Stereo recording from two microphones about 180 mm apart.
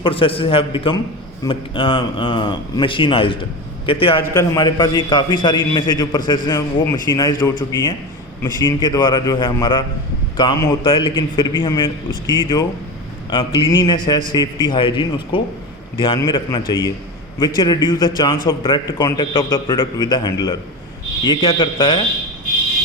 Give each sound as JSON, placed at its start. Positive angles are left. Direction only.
{"t": 0.0, "sound": "a man's voice", "side_deg": 30}